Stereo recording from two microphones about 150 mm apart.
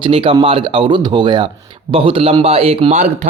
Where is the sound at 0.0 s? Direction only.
35° right (ahead or behind).